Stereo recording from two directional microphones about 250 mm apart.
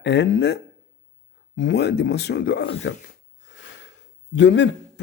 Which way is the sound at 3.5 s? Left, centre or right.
Left.